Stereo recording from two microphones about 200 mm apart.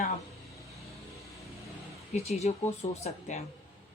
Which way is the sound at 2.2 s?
30° left (ahead or behind).